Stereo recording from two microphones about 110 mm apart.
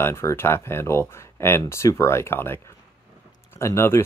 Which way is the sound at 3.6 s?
25° left (ahead or behind).